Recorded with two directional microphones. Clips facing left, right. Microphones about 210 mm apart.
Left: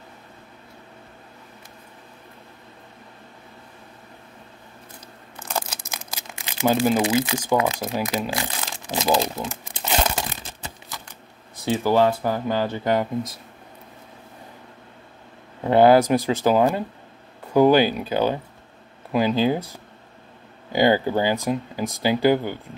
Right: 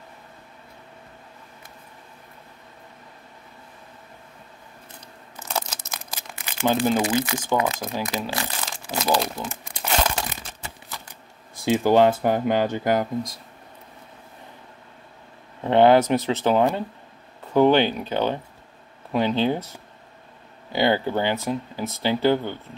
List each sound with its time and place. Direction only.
5.5 s a sound: 5° left (ahead or behind)
6.7 s speech: 10° left (ahead or behind)
7.8 s speech: 5° left (ahead or behind)
8.2 s speech: 15° left (ahead or behind)
9.4 s crumpling: 15° left (ahead or behind)
11.6 s speech: 15° right (ahead or behind)
12.9 s speech: 5° left (ahead or behind)
15.6 s speech: 10° left (ahead or behind)